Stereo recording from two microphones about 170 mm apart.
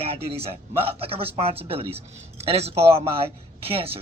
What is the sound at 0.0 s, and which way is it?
Speech, 35° right (ahead or behind).